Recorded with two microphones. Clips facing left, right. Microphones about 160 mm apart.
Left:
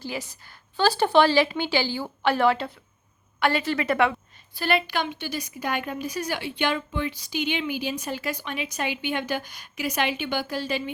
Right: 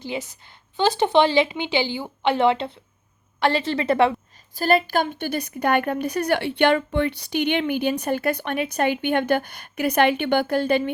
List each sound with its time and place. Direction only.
0.0 s a woman's voice: 20° right (ahead or behind)
4.5 s a woman's voice: 40° right (ahead or behind)